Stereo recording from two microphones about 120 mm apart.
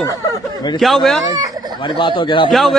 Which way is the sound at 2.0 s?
45° left (ahead or behind).